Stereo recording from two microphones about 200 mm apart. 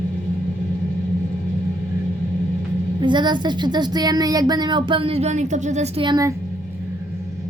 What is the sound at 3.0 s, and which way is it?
A woman's voice, 20° right (ahead or behind).